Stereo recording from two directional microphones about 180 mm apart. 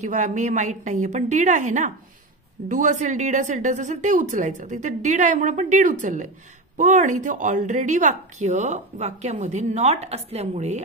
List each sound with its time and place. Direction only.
0.0 s a woman's voice: 45° right (ahead or behind)